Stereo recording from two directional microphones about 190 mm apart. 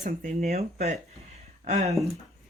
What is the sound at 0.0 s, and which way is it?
Speech, 45° right (ahead or behind).